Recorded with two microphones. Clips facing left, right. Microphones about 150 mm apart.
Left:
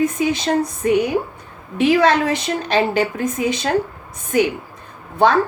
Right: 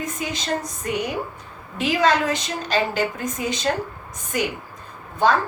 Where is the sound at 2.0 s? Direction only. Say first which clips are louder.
Left 4 dB; 60° left (ahead or behind).